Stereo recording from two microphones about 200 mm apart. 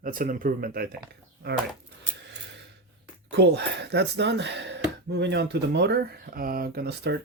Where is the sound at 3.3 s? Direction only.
55° right (ahead or behind).